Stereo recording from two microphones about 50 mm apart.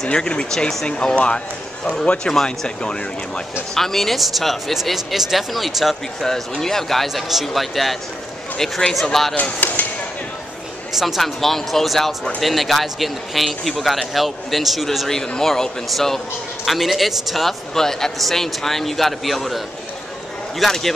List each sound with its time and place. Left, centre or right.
0.1 s a man's voice: centre
6.2 s a man's voice: centre
9.6 s speech: left
11.0 s a man's voice: centre